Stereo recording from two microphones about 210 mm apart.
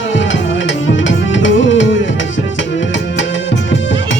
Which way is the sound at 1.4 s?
60° left (ahead or behind).